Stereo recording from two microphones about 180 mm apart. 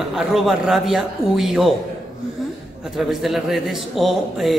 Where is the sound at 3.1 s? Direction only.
Centre (ahead or behind).